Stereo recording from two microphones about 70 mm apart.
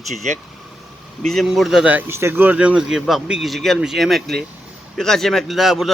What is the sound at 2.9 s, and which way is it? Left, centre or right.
A man's voice, centre.